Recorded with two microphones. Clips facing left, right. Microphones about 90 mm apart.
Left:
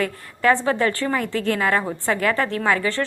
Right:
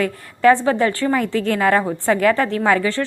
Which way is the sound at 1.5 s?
35° right (ahead or behind).